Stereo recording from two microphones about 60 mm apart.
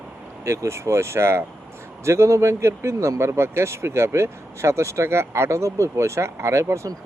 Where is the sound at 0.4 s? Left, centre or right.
Right.